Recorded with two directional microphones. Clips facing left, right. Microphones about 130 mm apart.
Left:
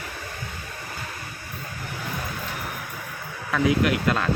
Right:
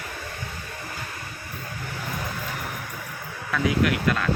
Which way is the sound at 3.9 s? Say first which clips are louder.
Left 1 dB; 25° left (ahead or behind).